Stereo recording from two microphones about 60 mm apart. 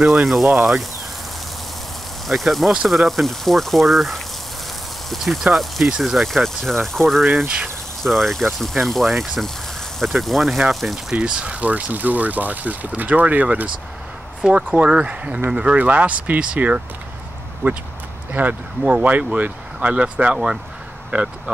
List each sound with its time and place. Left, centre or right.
0.0 s speech: centre
2.2 s speech: centre
6.1 s speech: centre
7.4 s speech: centre
8.0 s speech: centre
11.1 s speech: centre
14.7 s speech: right
17.6 s speech: right